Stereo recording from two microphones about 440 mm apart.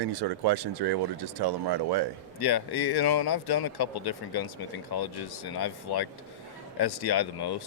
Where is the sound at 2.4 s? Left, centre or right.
Left.